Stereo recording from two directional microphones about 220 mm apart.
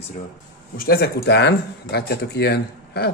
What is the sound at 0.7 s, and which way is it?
Speech, 45° left (ahead or behind).